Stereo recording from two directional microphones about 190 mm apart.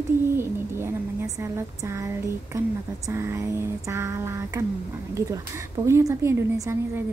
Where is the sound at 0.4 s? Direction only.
15° right (ahead or behind).